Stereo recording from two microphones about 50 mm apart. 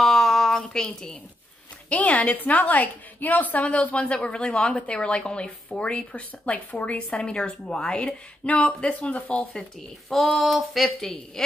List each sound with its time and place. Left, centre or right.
0.0 s a sound: centre
1.9 s a woman's voice: left
8.5 s a woman's voice: left
9.6 s speech: centre